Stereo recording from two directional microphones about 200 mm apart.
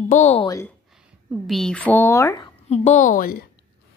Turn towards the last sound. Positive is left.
turn(degrees=45)  # may be behind; listen again after turning